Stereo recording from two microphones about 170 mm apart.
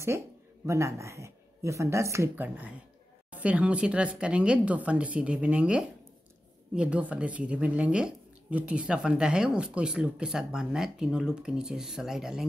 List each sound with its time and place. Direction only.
0.7 s speech: 15° right (ahead or behind)